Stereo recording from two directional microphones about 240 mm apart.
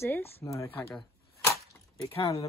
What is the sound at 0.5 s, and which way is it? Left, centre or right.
Cap gun, centre.